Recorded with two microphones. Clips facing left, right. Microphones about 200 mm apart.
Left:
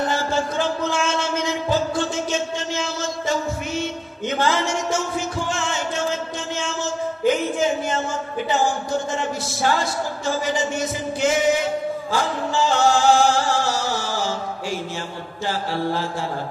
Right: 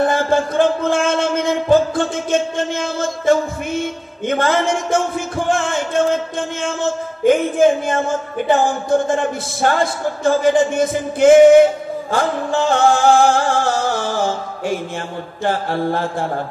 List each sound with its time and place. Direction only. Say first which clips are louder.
0.0 s speech: right 6 dB; 55° right (ahead or behind)
15.4 s mantra: right 5 dB; 55° right (ahead or behind)